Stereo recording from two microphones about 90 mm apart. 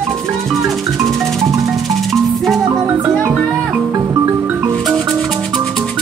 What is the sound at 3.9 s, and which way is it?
Music, 40° right (ahead or behind).